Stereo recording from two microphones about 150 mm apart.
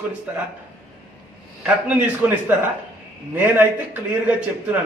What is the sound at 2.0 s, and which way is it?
A man's voice, 15° right (ahead or behind).